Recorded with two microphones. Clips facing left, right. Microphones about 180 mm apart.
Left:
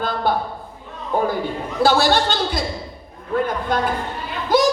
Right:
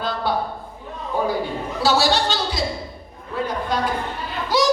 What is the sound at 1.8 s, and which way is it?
Speech, 55° left (ahead or behind).